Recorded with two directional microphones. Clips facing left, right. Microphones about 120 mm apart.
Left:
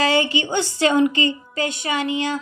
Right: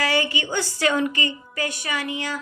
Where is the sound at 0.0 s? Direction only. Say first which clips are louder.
Left 4 dB; 25° left (ahead or behind).